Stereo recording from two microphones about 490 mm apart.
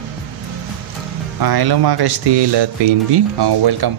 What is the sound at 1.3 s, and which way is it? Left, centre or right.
Speech, right.